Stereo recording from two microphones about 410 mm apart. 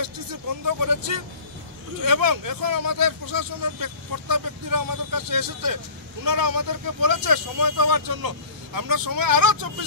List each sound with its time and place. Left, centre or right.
0.7 s speech: right